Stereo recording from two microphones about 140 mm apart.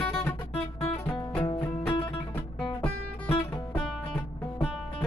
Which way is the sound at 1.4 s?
40° left (ahead or behind).